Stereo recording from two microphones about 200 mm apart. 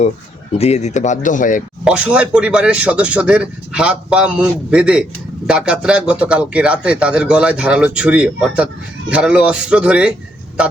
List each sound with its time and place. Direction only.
0.6 s speech: 35° left (ahead or behind)
1.8 s a man's voice: 5° right (ahead or behind)